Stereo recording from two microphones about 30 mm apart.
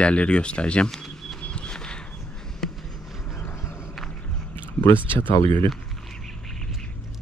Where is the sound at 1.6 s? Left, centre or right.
Left.